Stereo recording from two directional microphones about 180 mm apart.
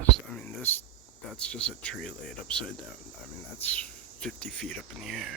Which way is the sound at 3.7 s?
5° left (ahead or behind).